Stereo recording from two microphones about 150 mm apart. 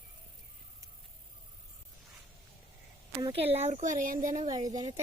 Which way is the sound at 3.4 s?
45° right (ahead or behind).